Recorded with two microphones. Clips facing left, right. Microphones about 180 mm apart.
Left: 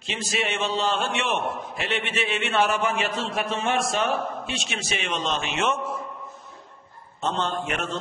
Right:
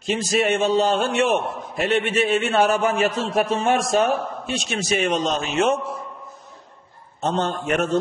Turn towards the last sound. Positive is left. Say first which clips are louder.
# right 6 dB
turn(degrees=-40)  # may be behind; listen again after turning